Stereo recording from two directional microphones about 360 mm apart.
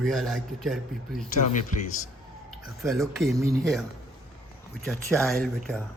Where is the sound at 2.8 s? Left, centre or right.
Centre.